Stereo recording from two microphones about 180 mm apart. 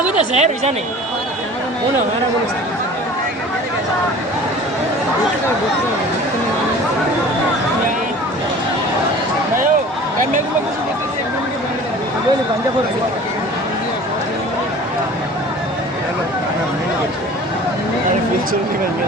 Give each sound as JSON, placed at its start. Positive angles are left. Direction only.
{"t": 0.3, "sound": "speech", "side_deg": -35}